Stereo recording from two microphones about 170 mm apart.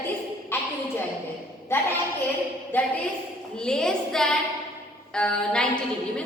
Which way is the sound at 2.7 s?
10° left (ahead or behind).